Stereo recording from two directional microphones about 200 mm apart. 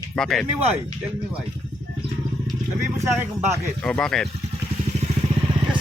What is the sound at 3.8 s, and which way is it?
Speech, 5° left (ahead or behind).